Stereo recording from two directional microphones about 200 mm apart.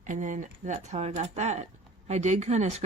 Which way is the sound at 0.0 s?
40° right (ahead or behind).